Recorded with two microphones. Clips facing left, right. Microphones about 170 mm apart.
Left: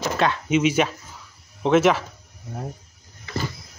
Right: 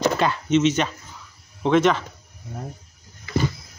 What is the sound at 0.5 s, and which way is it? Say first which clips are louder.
Speech: right 2 dB; 10° left (ahead or behind).